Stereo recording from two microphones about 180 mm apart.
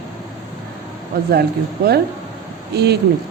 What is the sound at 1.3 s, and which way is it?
Speech, 60° right (ahead or behind).